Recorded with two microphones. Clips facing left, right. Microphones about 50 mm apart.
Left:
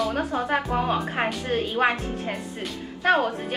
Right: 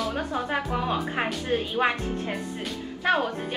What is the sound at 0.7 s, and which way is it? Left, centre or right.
Speech, left.